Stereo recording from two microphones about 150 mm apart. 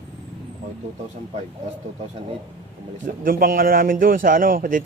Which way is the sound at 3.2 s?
75° right (ahead or behind).